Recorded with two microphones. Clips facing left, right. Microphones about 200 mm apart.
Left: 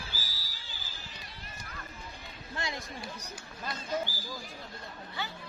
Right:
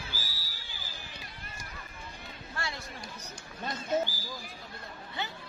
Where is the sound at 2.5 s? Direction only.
20° left (ahead or behind).